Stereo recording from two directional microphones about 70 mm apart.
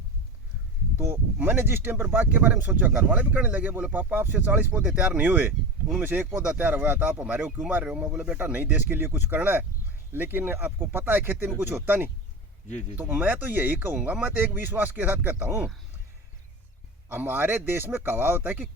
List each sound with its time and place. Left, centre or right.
0.9 s speech: right
8.5 s speech: right
17.1 s speech: right